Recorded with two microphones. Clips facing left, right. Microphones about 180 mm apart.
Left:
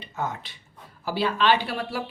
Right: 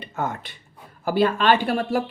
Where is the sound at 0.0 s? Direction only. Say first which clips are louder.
Right 3 dB; 55° right (ahead or behind).